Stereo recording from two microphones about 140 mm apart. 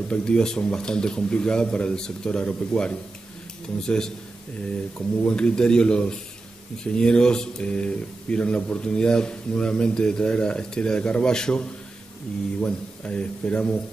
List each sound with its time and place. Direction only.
0.1 s speech: 5° left (ahead or behind)
12.6 s speech: 5° left (ahead or behind)